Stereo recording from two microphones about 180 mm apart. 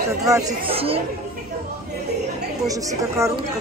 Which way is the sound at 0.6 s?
30° right (ahead or behind).